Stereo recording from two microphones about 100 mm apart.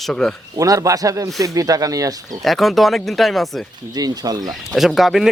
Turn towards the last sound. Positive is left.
turn(degrees=0)  # may be behind; listen again after turning